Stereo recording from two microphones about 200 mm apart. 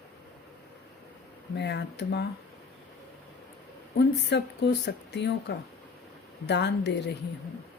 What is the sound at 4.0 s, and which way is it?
Speech, 60° left (ahead or behind).